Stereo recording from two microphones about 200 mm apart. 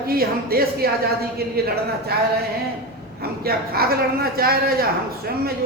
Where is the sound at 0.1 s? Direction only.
50° right (ahead or behind).